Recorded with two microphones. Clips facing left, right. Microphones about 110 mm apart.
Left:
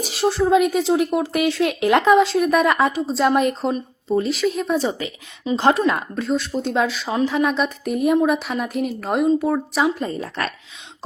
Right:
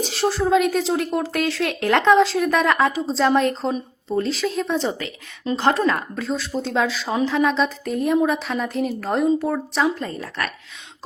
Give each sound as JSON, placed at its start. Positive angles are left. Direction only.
{"t": 0.1, "sound": "a woman's voice", "side_deg": 0}
{"t": 6.1, "sound": "a woman's voice", "side_deg": 0}
{"t": 10.0, "sound": "a woman's voice", "side_deg": 20}